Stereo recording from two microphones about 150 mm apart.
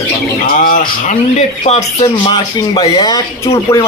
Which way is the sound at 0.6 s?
55° left (ahead or behind).